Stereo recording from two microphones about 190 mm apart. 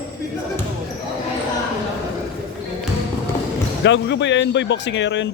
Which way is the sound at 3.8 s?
70° left (ahead or behind).